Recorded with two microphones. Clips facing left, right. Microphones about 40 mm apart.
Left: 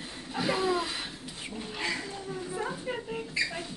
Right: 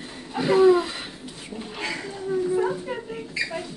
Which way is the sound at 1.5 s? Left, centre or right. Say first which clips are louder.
Right 3 dB; centre.